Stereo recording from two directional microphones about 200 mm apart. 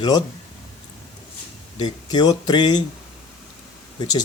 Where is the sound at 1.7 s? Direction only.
20° left (ahead or behind).